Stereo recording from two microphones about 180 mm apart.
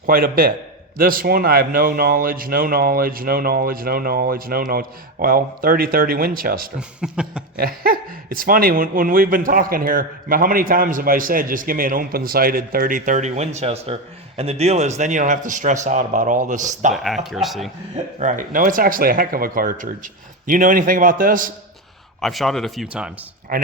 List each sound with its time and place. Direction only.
0.0 s a man's voice: 55° right (ahead or behind)
6.7 s speech: 5° right (ahead or behind)
7.6 s speech: 55° right (ahead or behind)
16.9 s speech: centre (ahead or behind)
18.2 s speech: 45° right (ahead or behind)
22.2 s speech: centre (ahead or behind)